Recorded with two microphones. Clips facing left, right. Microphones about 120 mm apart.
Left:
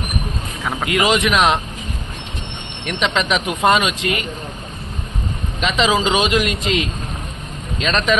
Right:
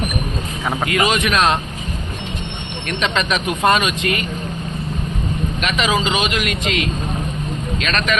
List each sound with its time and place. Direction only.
0.9 s speech: 20° left (ahead or behind)
2.8 s speech: 20° left (ahead or behind)
5.5 s speech: 25° left (ahead or behind)